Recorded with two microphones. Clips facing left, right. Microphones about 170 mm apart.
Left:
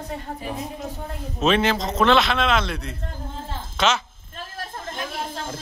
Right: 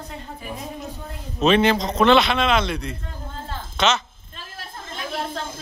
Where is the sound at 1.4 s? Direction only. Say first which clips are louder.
Right 3 dB; centre (ahead or behind).